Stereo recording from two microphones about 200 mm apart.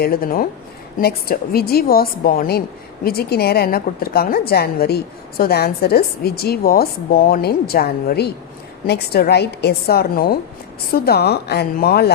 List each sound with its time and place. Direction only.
0.0 s a woman's voice: 50° left (ahead or behind)